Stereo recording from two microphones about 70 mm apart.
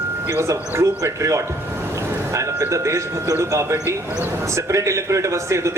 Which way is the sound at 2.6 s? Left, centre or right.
Right.